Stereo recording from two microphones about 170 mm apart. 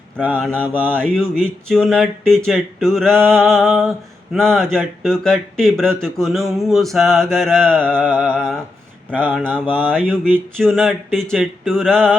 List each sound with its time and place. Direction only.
0.3 s speech: 5° left (ahead or behind)
0.6 s mantra: 10° right (ahead or behind)
0.9 s speech: 5° left (ahead or behind)
9.1 s mantra: 10° right (ahead or behind)
10.6 s speech: centre (ahead or behind)